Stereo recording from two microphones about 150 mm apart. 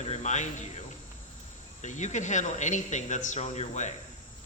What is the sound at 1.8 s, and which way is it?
Speech, 55° left (ahead or behind).